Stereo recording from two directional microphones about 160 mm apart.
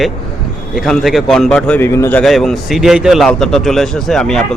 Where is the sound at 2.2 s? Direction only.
Centre (ahead or behind).